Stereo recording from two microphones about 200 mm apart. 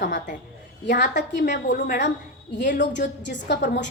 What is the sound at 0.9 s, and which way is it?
A woman's voice, 60° left (ahead or behind).